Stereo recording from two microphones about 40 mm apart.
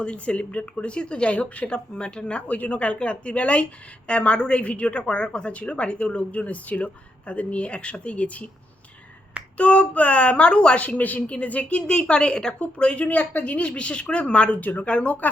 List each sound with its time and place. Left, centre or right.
0.0 s speech: left
5.5 s speech: left
9.6 s speech: left
10.8 s speech: left
12.5 s speech: left
14.6 s speech: left
14.8 s speech: left